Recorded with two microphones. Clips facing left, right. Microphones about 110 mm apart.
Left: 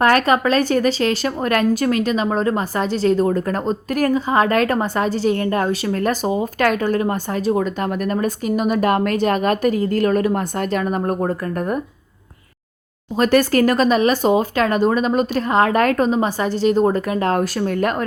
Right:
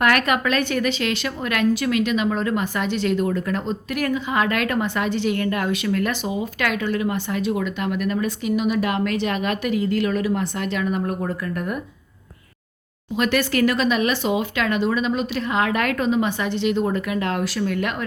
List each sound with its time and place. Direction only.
0.0 s a woman's voice: 35° left (ahead or behind)
13.1 s a woman's voice: 40° left (ahead or behind)